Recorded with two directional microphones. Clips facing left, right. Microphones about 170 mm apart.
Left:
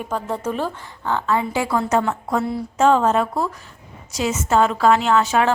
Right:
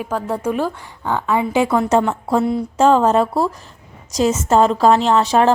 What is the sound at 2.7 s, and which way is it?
A woman's voice, 35° right (ahead or behind).